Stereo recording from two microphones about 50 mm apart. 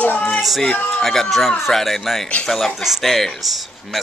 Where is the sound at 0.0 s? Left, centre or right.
Left.